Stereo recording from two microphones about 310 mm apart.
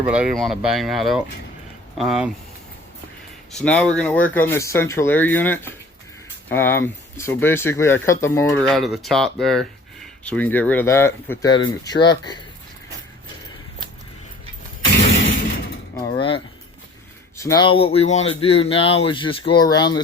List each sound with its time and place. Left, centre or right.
0.0 s speech: centre
3.5 s speech: centre
16.0 s a sound: centre
17.3 s speech: centre